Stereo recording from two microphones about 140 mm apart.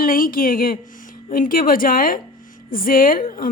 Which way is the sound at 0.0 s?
90° left.